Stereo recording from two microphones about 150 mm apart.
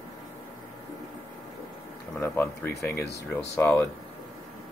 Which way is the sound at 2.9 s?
90° left.